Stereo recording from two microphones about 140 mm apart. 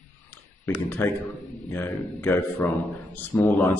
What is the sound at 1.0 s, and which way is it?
Speech, 20° left (ahead or behind).